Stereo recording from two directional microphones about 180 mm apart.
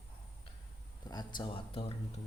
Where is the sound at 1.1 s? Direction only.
25° left (ahead or behind).